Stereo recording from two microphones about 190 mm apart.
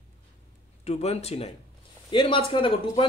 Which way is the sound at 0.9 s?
35° left (ahead or behind).